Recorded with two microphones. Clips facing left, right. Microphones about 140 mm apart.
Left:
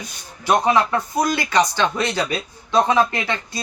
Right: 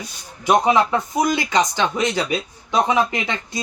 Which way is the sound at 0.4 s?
15° right (ahead or behind).